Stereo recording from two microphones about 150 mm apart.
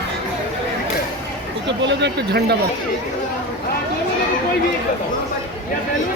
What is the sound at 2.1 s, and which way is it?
Speech, 90° right.